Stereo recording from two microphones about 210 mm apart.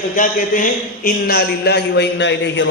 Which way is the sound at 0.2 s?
40° left (ahead or behind).